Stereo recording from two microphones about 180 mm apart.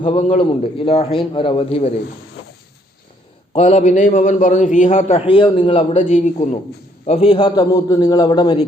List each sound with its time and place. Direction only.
0.0 s a man's voice: 40° left (ahead or behind)
3.5 s a man's voice: 35° left (ahead or behind)
6.0 s a man's voice: 45° left (ahead or behind); by 8.6 s 25° left (ahead or behind)